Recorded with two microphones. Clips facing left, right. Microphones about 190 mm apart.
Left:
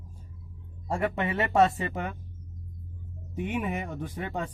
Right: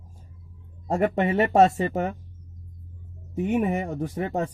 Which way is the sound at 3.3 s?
40° right (ahead or behind).